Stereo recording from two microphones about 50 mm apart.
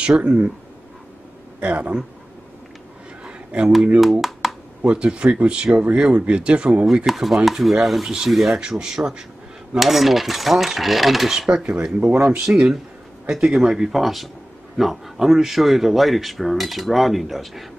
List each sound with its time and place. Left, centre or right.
0.2 s speech: right
1.6 s speech: right
3.3 s a sound: centre
4.0 s speech: centre
4.8 s speech: right
7.1 s speech: centre
8.5 s speech: centre
9.8 s speech: centre
11.6 s speech: right
12.4 s speech: centre